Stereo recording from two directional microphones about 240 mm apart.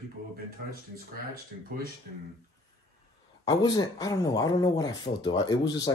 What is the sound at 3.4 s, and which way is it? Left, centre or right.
Speech, centre.